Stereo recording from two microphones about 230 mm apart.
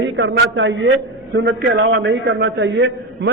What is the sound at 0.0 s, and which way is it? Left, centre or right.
A man's voice, right.